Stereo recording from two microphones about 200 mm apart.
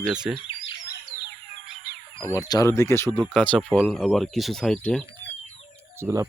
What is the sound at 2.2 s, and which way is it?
Speech, 15° left (ahead or behind).